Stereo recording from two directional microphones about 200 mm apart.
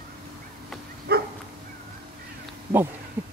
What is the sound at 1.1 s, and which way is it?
Dog, 50° right (ahead or behind).